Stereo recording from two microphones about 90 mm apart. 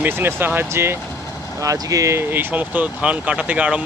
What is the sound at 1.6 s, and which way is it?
Speech, 40° right (ahead or behind).